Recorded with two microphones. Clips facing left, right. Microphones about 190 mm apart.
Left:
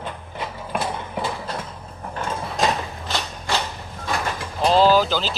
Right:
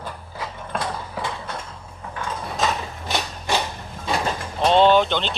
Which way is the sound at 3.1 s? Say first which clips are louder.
Right 2 dB; 15° right (ahead or behind).